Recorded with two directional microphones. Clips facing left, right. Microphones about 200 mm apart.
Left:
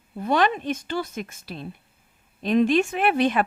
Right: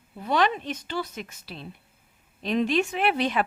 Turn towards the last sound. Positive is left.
turn(degrees=50)  # may be behind; listen again after turning